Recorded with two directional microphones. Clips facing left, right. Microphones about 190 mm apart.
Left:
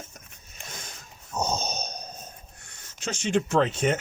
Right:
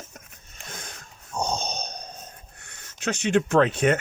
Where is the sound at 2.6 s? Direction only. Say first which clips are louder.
Right 5 dB; 60° right (ahead or behind).